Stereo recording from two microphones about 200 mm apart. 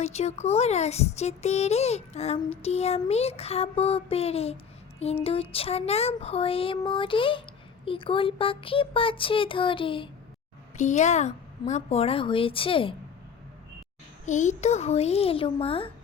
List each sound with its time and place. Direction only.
0.0 s speech: 35° left (ahead or behind)
4.9 s a sound: 30° left (ahead or behind)
10.8 s speech: 35° left (ahead or behind)
14.3 s speech: 35° left (ahead or behind)